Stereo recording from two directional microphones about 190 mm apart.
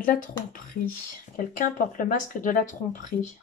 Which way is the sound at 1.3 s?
45° left (ahead or behind).